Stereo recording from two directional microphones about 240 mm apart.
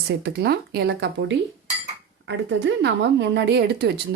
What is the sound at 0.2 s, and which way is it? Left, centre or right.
Speech, right.